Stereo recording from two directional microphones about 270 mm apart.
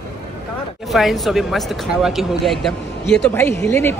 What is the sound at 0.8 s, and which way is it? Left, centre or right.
Speech, centre.